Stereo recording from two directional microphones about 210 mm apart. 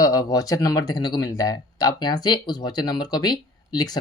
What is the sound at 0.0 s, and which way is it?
Speech, 15° left (ahead or behind).